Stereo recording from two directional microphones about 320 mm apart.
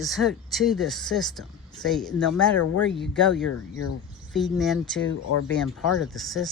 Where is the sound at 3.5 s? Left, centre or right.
Left.